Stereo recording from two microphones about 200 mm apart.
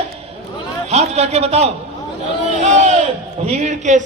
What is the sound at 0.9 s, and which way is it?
A man's voice, 35° right (ahead or behind).